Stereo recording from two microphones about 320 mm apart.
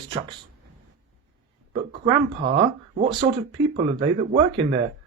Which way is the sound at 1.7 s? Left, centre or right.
Centre.